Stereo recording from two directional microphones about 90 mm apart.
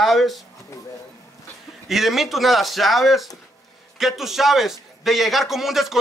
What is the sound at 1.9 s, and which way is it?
A man's voice, 5° right (ahead or behind).